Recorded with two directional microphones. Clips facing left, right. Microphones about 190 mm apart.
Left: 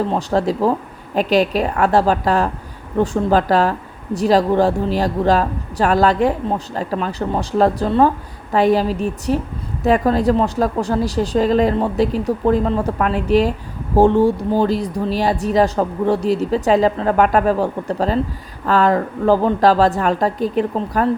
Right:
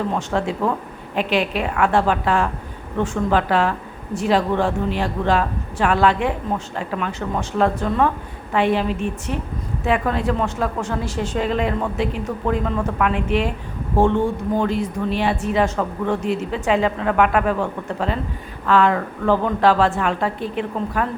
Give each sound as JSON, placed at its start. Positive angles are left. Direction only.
{"t": 0.1, "sound": "speech", "side_deg": 35}